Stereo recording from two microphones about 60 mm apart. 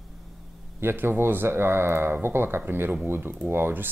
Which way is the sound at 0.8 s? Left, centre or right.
Right.